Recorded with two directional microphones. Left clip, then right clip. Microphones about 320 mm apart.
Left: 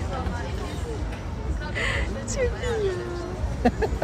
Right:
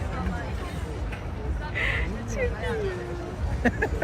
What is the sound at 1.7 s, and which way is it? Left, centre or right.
Music, centre.